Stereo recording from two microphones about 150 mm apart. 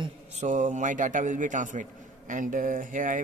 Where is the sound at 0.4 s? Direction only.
55° right (ahead or behind).